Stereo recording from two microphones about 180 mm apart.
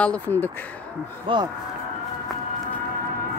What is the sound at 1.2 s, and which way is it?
Speech, 25° right (ahead or behind).